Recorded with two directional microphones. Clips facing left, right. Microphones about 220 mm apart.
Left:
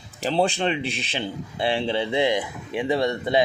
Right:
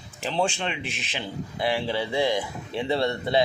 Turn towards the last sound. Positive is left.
turn(degrees=15)  # may be behind; listen again after turning